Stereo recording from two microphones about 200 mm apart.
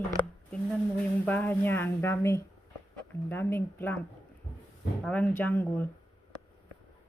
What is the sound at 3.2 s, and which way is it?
Speech, 10° left (ahead or behind).